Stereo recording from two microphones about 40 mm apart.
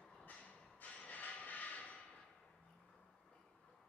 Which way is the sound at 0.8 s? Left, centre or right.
Left.